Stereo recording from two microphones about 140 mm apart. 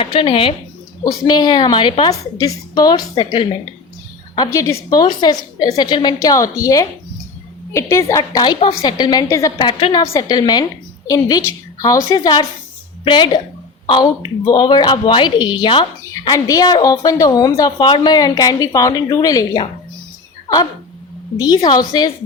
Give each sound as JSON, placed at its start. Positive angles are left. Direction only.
{"t": 0.0, "sound": "a woman's voice", "side_deg": 40}
{"t": 1.0, "sound": "a woman's voice", "side_deg": 30}
{"t": 4.4, "sound": "a woman's voice", "side_deg": 20}
{"t": 21.3, "sound": "a woman's voice", "side_deg": 30}